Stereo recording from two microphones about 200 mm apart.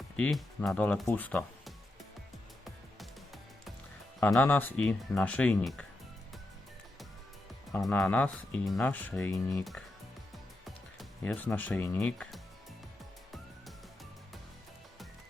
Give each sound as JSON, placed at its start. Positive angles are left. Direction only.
{"t": 0.2, "sound": "speech", "side_deg": 0}
{"t": 2.6, "sound": "music", "side_deg": 0}
{"t": 4.2, "sound": "speech", "side_deg": 10}
{"t": 7.7, "sound": "speech", "side_deg": 5}
{"t": 11.2, "sound": "speech", "side_deg": 10}